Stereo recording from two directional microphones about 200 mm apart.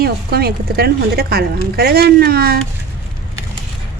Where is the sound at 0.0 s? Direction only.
50° right (ahead or behind).